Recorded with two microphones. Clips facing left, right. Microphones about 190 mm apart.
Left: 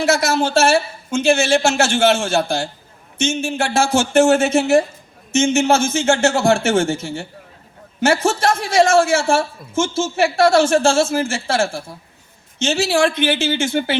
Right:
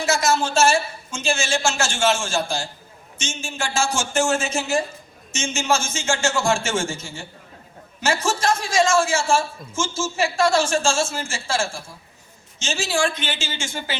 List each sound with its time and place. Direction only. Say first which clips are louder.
0.0 s a man's voice: left 4 dB; 60° left (ahead or behind)